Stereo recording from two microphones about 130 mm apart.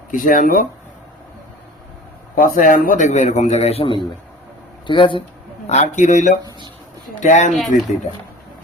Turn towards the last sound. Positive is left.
turn(degrees=0)  # may be behind; listen again after turning